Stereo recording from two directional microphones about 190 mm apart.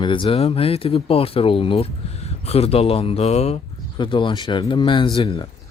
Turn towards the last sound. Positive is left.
turn(degrees=25)  # may be behind; listen again after turning